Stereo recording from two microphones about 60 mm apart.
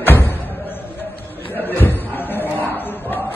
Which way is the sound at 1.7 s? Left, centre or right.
Left.